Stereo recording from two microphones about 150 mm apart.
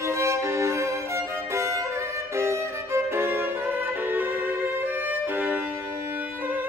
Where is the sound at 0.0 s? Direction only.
20° right (ahead or behind).